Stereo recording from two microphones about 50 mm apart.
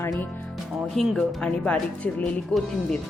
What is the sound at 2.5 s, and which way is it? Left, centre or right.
Speech, centre.